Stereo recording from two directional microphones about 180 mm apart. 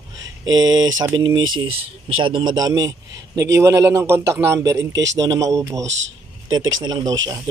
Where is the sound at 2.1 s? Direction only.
30° right (ahead or behind).